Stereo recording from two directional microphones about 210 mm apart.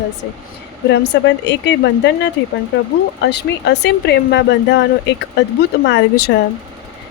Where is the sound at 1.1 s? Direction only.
55° left (ahead or behind).